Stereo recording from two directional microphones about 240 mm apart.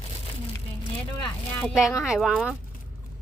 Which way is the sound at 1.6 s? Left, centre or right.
Centre.